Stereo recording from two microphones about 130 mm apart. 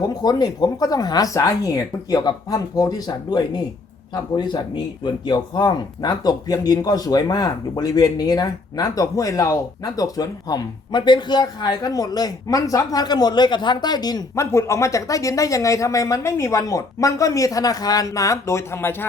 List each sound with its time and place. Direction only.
0.0 s speech: 30° left (ahead or behind)